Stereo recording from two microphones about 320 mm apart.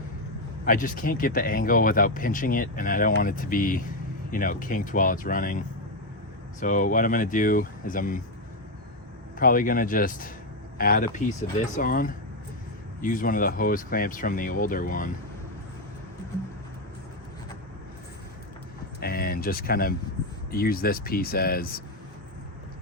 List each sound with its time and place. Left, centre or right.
0.6 s speech: left
9.4 s speech: left
18.9 s speech: left